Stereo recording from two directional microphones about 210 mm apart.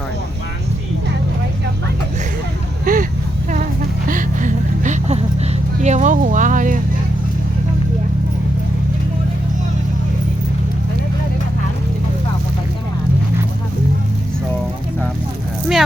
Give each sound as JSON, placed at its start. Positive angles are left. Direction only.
{"t": 2.8, "sound": "vehicle", "side_deg": -40}
{"t": 4.1, "sound": "a sound", "side_deg": -40}
{"t": 5.8, "sound": "vehicle", "side_deg": -35}